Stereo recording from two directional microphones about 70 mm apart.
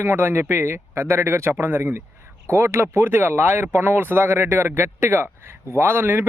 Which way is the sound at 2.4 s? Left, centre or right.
Right.